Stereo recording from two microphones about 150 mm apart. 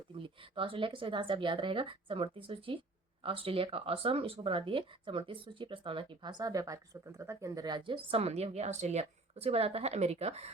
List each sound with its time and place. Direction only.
0.2 s speech: 35° right (ahead or behind)